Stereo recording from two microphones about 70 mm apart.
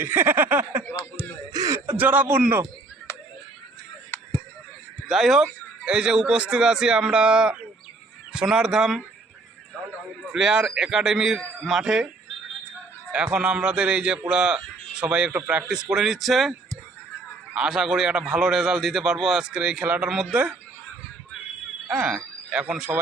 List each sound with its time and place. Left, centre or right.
0.0 s speech: right
1.5 s a sound: right
2.0 s speech: right
5.0 s a man's voice: centre
10.3 s a man's voice: centre
13.1 s a man's voice: centre
21.8 s a man's voice: centre